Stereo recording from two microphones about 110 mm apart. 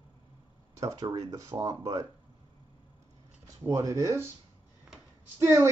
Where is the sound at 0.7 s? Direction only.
30° right (ahead or behind).